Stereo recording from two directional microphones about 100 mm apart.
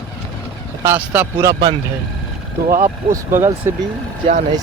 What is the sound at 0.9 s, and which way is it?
Speech, 15° right (ahead or behind).